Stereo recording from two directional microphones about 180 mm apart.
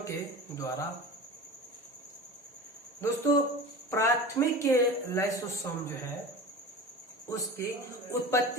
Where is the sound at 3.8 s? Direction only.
15° left (ahead or behind).